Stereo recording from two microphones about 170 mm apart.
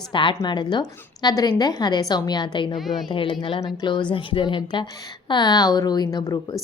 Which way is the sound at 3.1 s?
30° left (ahead or behind).